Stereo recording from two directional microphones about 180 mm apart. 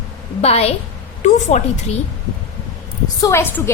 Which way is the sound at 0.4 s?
35° left (ahead or behind).